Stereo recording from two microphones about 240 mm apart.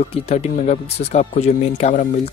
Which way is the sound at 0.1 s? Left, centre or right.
Left.